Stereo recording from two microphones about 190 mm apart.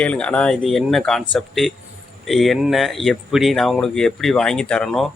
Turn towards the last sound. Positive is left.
turn(degrees=0)  # may be behind; listen again after turning